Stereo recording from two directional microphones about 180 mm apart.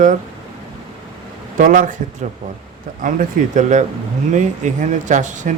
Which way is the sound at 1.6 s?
50° right (ahead or behind).